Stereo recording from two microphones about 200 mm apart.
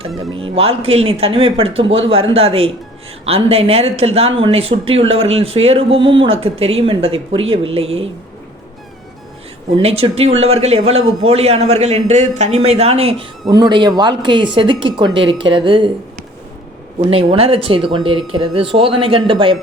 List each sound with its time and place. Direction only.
0.3 s speech: 30° right (ahead or behind)
9.7 s a man's voice: 30° right (ahead or behind)
17.1 s speech: 30° right (ahead or behind)